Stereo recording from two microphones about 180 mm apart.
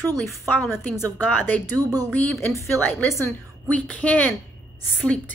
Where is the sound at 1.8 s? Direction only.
20° right (ahead or behind).